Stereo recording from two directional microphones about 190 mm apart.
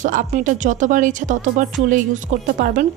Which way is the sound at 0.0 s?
45° right (ahead or behind).